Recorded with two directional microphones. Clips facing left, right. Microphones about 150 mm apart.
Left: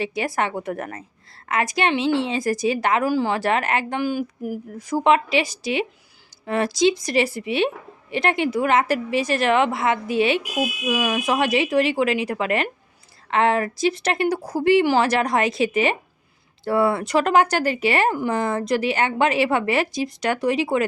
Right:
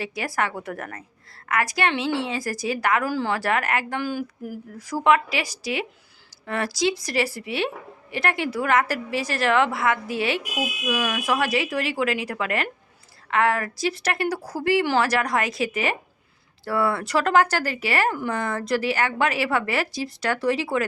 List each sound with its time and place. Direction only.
0.0 s speech: 20° left (ahead or behind)